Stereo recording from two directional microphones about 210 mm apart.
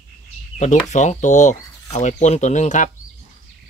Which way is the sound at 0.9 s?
35° left (ahead or behind).